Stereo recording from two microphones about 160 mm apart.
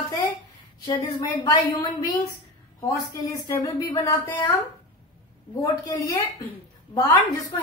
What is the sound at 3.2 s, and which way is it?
Speech, 20° left (ahead or behind).